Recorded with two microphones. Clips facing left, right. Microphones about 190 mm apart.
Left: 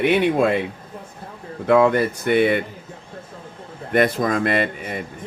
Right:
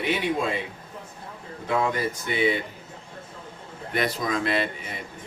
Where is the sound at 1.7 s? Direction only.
65° left (ahead or behind).